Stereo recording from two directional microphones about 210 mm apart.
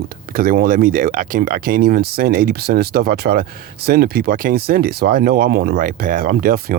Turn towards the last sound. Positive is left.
turn(degrees=-45)  # may be behind; listen again after turning